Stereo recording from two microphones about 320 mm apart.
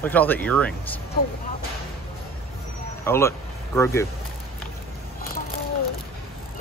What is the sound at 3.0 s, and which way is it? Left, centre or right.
Speech, centre.